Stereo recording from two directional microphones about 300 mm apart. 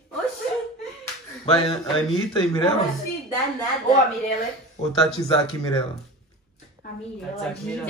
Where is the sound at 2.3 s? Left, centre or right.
Centre.